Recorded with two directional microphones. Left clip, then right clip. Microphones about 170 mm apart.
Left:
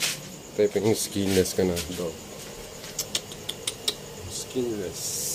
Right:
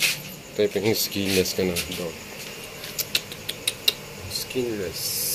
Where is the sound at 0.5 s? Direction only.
15° left (ahead or behind).